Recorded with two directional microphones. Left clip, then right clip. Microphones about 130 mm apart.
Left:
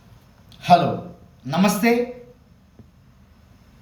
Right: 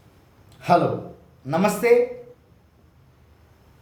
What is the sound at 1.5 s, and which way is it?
Speech, 25° right (ahead or behind).